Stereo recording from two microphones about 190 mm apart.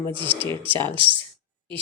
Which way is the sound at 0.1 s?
25° right (ahead or behind).